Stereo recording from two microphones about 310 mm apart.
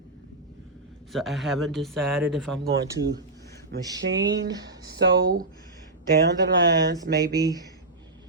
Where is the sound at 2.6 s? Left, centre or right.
Right.